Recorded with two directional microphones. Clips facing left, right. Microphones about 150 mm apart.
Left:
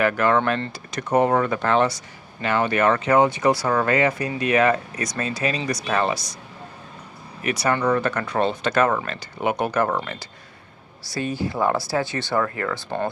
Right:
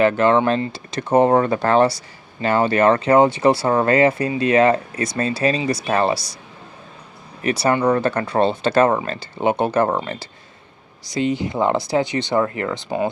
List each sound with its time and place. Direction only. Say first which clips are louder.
0.0 s speech: right 4 dB; 25° right (ahead or behind)
7.4 s speech: right 4 dB; 30° right (ahead or behind)